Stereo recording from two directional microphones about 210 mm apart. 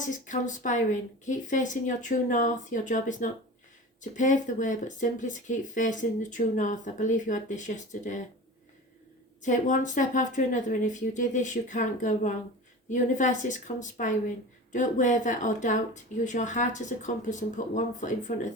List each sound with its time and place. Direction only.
0.1 s speech: 35° left (ahead or behind)
9.4 s speech: 35° left (ahead or behind)